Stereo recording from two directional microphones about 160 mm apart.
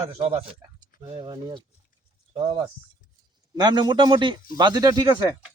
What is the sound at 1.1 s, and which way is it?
Speech, 30° right (ahead or behind).